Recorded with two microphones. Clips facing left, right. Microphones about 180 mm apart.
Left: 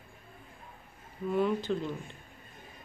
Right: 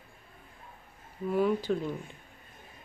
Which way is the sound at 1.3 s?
5° right (ahead or behind).